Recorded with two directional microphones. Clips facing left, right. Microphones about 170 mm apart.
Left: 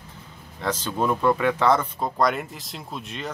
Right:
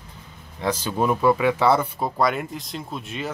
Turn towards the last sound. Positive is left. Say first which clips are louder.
# right 3 dB
turn(degrees=0)  # may be behind; listen again after turning